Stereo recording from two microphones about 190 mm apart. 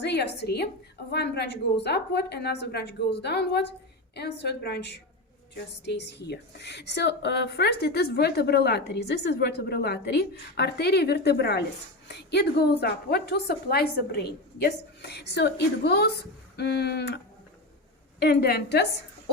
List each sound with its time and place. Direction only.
0.0 s a woman's voice: 60° left (ahead or behind)
18.2 s a woman's voice: 55° left (ahead or behind)